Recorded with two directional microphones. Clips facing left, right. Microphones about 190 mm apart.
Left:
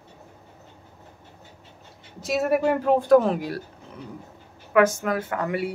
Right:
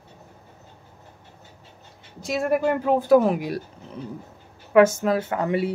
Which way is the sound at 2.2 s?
Centre (ahead or behind).